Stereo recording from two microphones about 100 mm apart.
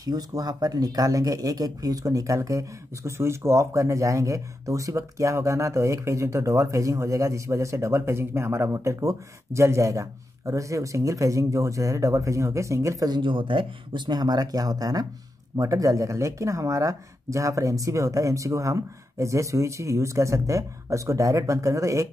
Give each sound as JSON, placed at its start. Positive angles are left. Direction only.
{"t": 0.0, "sound": "speech", "side_deg": -40}
{"t": 13.2, "sound": "speech", "side_deg": -55}